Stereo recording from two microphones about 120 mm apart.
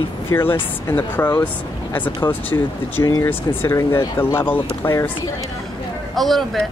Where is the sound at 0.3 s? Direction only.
20° left (ahead or behind).